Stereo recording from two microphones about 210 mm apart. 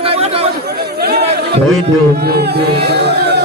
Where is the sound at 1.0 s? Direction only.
50° right (ahead or behind).